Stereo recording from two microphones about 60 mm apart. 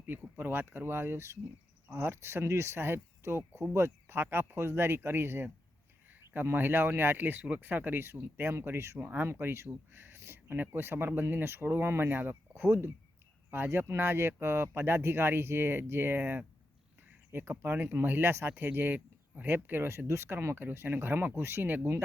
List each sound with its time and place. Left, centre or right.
0.3 s speech: right
20.6 s speech: right